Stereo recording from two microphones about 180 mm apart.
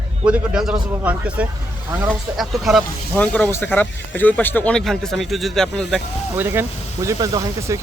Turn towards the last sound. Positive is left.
turn(degrees=-15)  # may be behind; listen again after turning